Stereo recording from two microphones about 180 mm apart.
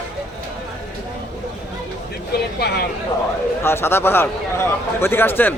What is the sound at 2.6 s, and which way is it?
Speech, 65° left (ahead or behind).